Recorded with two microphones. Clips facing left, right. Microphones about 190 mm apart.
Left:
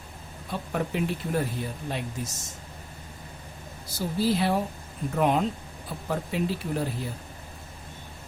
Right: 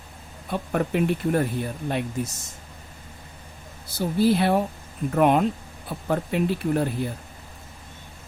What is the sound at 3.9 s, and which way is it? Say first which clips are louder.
Speech: right 5 dB; 60° right (ahead or behind).